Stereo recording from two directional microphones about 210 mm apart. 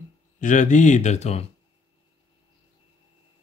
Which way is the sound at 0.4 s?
35° left (ahead or behind).